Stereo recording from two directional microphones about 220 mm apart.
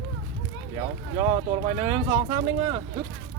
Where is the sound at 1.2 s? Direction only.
20° right (ahead or behind).